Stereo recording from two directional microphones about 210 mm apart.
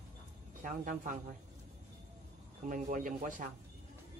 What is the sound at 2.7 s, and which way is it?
Speech, 40° right (ahead or behind).